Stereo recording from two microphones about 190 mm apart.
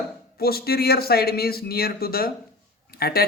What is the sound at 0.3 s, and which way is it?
A man's voice, 55° left (ahead or behind).